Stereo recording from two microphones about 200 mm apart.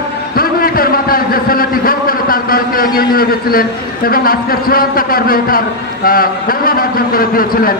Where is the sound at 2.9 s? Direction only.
50° left (ahead or behind).